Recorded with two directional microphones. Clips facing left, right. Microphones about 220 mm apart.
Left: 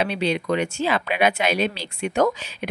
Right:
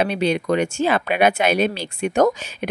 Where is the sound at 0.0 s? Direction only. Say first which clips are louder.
Right 3 dB; 50° right (ahead or behind).